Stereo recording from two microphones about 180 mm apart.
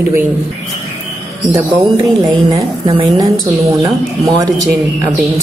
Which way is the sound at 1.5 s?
15° right (ahead or behind).